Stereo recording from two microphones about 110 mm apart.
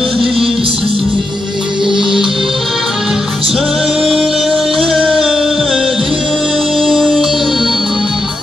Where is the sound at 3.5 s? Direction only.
5° right (ahead or behind).